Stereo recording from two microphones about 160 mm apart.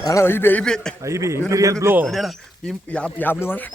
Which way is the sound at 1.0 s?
20° right (ahead or behind).